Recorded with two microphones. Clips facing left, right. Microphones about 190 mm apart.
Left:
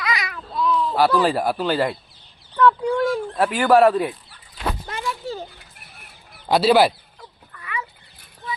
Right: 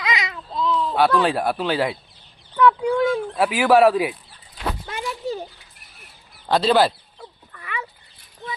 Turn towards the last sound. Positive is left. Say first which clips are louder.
# even
turn(degrees=-25)  # may be behind; listen again after turning